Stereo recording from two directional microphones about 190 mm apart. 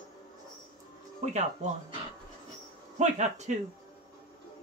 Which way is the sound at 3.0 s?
35° right (ahead or behind).